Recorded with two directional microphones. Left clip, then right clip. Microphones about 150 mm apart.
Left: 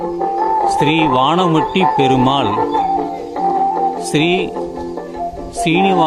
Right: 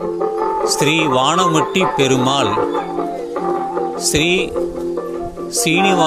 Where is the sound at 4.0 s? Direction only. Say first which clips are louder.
Even; centre (ahead or behind).